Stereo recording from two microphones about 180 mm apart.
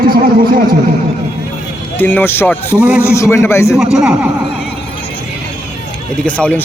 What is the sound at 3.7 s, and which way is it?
Speech, 5° right (ahead or behind).